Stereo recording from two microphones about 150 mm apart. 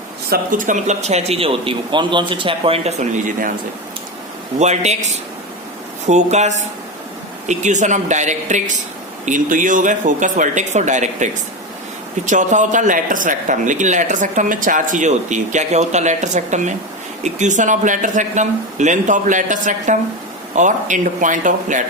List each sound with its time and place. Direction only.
0.3 s speech: 65° right (ahead or behind)
4.6 s speech: 50° right (ahead or behind)